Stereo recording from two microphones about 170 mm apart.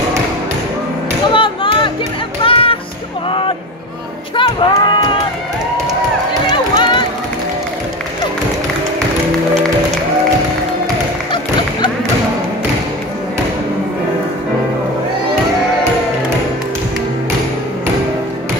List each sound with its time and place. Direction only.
1.3 s music: 30° left (ahead or behind)
6.5 s run: 30° left (ahead or behind)